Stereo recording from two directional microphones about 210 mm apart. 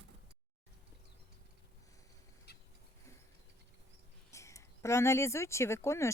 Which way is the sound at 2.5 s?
50° left (ahead or behind).